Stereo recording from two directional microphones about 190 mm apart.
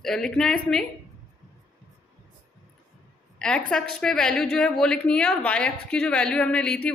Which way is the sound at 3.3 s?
5° left (ahead or behind).